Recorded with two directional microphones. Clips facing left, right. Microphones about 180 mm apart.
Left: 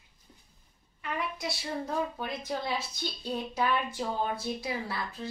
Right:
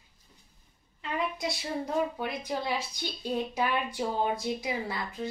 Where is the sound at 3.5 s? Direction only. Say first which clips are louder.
Even; 15° right (ahead or behind).